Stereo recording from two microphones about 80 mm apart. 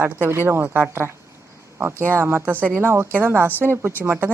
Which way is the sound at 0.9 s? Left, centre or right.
Right.